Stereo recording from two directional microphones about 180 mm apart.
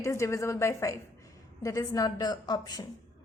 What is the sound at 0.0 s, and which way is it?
A woman's voice, 15° left (ahead or behind).